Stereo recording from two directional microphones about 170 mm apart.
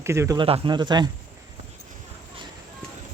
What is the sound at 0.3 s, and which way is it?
Speech, 30° right (ahead or behind).